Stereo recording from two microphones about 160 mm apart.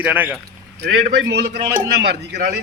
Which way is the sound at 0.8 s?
90° right.